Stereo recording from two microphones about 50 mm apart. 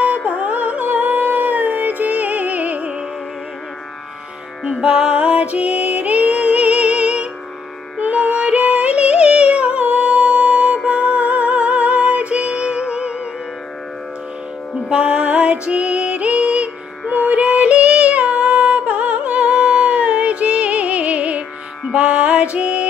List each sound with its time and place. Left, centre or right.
0.0 s music: right
4.7 s music: centre
14.9 s music: centre